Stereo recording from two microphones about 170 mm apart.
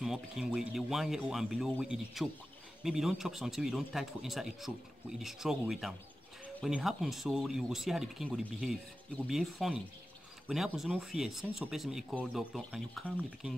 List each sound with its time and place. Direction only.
0.0 s speech: 5° right (ahead or behind)